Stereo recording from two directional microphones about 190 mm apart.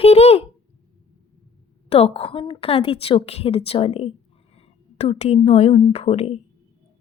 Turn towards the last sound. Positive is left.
turn(degrees=35)  # may be behind; listen again after turning